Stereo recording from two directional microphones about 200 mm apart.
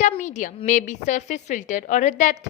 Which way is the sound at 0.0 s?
35° left (ahead or behind).